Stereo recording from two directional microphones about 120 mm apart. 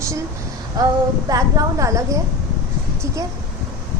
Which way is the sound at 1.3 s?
30° right (ahead or behind).